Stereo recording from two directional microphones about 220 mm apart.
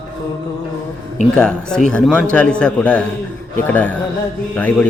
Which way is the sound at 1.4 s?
5° left (ahead or behind).